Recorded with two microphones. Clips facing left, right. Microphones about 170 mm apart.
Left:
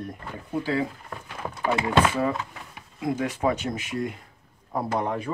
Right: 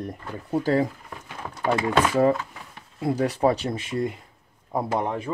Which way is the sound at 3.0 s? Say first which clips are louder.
Right 4 dB; 35° right (ahead or behind).